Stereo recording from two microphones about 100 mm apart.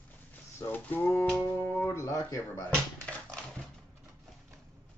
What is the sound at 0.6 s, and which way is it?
Speech, 20° left (ahead or behind).